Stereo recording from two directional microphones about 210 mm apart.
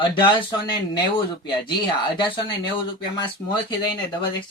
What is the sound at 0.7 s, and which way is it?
Speech, 20° left (ahead or behind).